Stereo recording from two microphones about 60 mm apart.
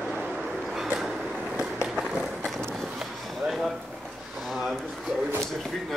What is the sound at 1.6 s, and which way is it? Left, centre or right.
Run, centre.